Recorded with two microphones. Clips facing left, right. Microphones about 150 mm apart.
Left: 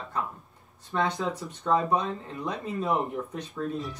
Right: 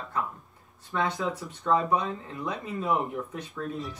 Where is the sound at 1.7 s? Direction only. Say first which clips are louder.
Even; 40° left (ahead or behind).